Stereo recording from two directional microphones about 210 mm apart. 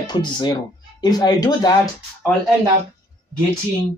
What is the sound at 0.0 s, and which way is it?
Speech, 20° left (ahead or behind).